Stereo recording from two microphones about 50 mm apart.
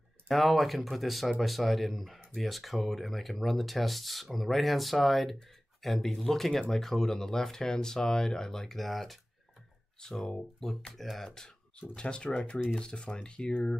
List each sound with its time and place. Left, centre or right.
0.3 s speech: centre
9.9 s speech: centre